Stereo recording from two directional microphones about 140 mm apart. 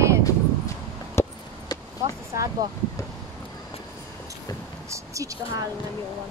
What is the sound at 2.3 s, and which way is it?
Speech, 25° right (ahead or behind).